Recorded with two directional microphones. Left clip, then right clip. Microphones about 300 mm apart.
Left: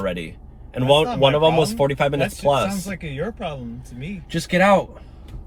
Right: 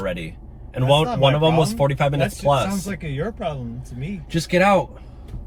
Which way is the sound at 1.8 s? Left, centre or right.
Centre.